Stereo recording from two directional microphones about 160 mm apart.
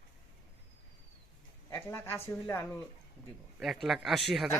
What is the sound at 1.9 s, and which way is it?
Speech, 15° left (ahead or behind).